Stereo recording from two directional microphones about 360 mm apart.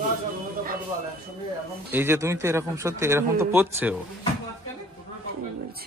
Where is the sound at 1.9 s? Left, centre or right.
Centre.